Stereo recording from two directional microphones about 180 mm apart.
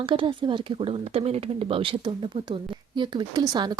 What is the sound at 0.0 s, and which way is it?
Speech, 30° right (ahead or behind).